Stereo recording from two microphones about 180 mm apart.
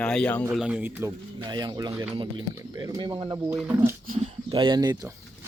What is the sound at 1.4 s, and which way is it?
Speech, 25° right (ahead or behind).